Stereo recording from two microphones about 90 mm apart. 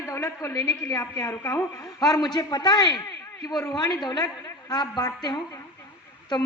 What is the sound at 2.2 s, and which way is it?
A woman's voice, 50° left (ahead or behind).